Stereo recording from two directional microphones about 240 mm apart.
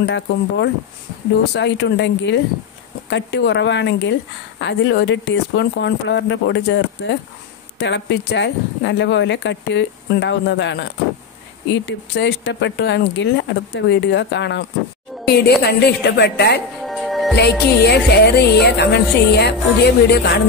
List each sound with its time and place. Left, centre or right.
0.0 s speech: left
16.8 s music: centre
17.4 s speech: left